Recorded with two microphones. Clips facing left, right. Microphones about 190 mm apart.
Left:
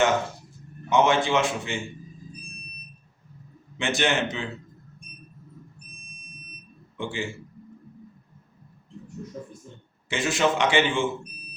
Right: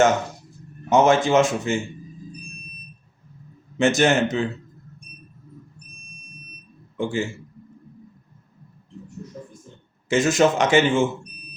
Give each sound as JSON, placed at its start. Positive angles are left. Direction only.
{"t": 0.9, "sound": "a man's voice", "side_deg": -45}
{"t": 3.8, "sound": "a man's voice", "side_deg": -45}
{"t": 6.9, "sound": "a man's voice", "side_deg": -45}
{"t": 10.1, "sound": "a man's voice", "side_deg": -45}